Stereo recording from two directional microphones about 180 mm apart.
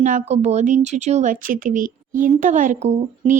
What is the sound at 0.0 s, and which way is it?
Speech, 45° right (ahead or behind).